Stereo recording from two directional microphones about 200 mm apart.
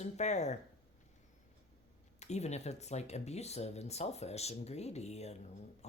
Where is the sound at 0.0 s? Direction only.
35° left (ahead or behind).